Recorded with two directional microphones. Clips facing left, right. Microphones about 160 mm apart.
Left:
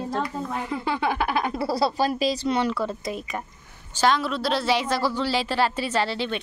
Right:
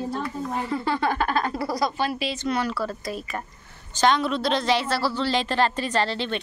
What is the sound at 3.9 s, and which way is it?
A woman's voice, 5° left (ahead or behind).